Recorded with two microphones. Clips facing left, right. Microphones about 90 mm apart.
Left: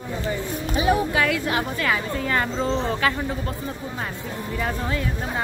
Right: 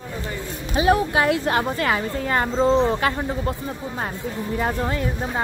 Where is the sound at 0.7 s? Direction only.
35° right (ahead or behind).